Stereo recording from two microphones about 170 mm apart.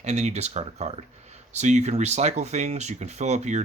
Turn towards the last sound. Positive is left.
turn(degrees=-45)  # may be behind; listen again after turning